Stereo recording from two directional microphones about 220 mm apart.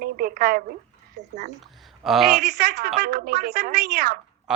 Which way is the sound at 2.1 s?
Centre (ahead or behind).